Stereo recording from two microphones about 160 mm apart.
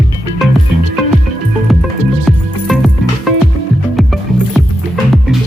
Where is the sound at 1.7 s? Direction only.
Centre (ahead or behind).